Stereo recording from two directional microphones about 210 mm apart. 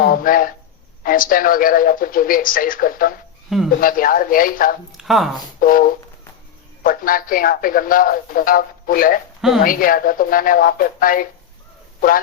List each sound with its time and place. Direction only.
0.0 s speech: 40° left (ahead or behind)
4.9 s speech: centre (ahead or behind)
5.5 s speech: 40° left (ahead or behind)